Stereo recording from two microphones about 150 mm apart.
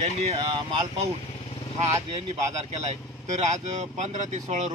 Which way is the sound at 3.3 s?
50° right (ahead or behind).